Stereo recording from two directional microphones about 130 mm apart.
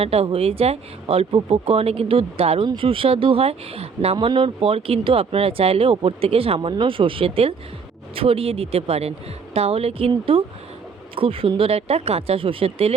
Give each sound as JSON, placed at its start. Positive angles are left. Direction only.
{"t": 0.0, "sound": "speech", "side_deg": -50}